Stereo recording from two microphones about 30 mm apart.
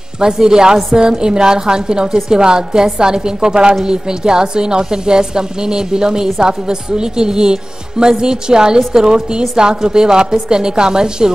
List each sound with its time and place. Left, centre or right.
0.2 s a woman's voice: right